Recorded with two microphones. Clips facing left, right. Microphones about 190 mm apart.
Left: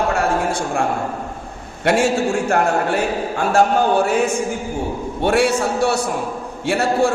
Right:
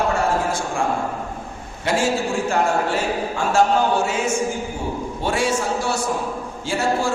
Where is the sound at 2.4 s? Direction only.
60° left (ahead or behind).